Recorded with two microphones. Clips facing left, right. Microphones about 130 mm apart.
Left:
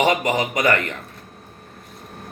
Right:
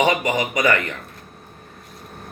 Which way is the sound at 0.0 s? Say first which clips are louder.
Even; 30° left (ahead or behind).